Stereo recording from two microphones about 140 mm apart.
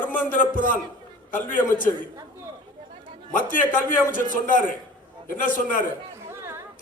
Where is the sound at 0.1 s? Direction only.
70° left (ahead or behind).